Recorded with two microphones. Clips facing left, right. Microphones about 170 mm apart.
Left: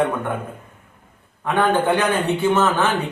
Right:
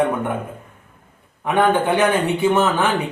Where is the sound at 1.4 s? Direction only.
15° right (ahead or behind).